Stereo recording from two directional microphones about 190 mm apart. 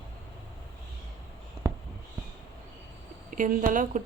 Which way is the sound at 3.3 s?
45° right (ahead or behind).